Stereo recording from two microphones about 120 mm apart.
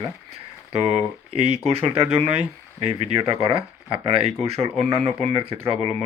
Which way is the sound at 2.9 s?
55° right (ahead or behind).